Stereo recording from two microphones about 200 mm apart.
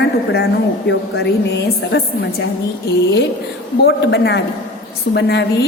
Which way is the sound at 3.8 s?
55° left (ahead or behind).